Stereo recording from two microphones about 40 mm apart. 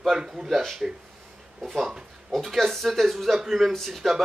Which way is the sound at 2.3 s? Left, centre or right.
Centre.